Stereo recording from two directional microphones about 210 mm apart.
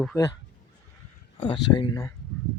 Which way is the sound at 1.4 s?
20° left (ahead or behind).